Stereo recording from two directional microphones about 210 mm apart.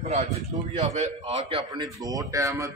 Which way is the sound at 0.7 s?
30° right (ahead or behind).